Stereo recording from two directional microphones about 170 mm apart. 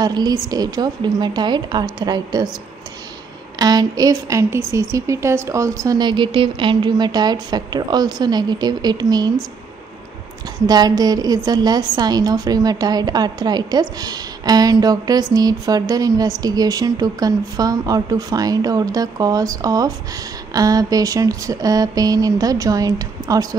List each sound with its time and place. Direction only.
0.0 s a woman's voice: 25° right (ahead or behind)
3.5 s a woman's voice: 20° right (ahead or behind)
10.7 s a woman's voice: 25° right (ahead or behind)